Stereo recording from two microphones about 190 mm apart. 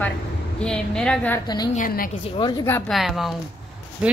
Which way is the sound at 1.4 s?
20° left (ahead or behind).